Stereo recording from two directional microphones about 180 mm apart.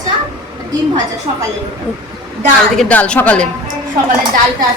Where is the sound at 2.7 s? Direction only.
5° left (ahead or behind).